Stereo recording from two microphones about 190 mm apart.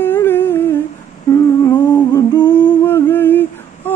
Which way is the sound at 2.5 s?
10° left (ahead or behind).